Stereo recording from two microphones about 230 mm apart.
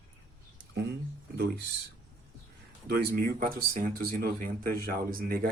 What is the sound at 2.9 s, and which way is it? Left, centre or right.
Speech, right.